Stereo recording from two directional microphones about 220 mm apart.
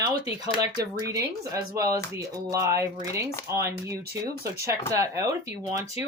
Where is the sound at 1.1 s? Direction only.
15° right (ahead or behind).